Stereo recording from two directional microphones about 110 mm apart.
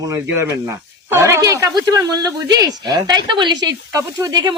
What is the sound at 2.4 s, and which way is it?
Speech, 40° right (ahead or behind).